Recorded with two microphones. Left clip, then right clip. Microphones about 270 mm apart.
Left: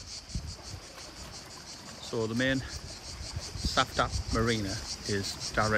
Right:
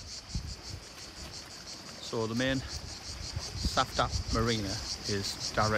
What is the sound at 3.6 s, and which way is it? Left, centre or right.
Speech, centre.